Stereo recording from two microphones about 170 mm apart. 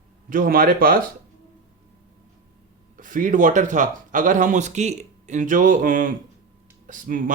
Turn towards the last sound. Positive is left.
turn(degrees=-55)  # may be behind; listen again after turning